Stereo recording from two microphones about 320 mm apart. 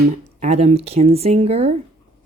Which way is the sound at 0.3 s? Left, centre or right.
Right.